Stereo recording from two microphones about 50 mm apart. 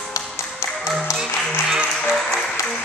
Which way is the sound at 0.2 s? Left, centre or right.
Left.